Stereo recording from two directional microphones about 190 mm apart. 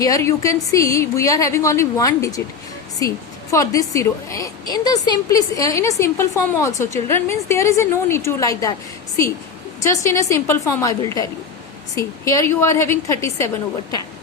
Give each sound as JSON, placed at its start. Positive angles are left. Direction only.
{"t": 0.0, "sound": "a woman's voice", "side_deg": 15}
{"t": 3.5, "sound": "a woman's voice", "side_deg": 15}
{"t": 9.8, "sound": "a woman's voice", "side_deg": 15}